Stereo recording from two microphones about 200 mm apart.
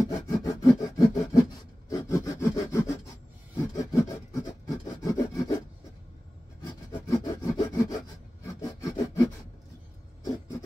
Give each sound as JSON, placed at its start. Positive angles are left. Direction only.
{"t": 0.1, "sound": "sawing", "side_deg": 20}
{"t": 3.5, "sound": "rub", "side_deg": 15}
{"t": 6.9, "sound": "sawing", "side_deg": 20}
{"t": 8.5, "sound": "rub", "side_deg": 15}